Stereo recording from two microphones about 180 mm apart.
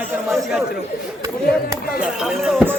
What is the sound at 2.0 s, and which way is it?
Speech, 5° right (ahead or behind).